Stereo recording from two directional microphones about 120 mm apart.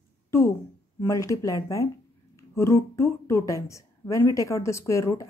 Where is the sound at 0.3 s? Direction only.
20° left (ahead or behind).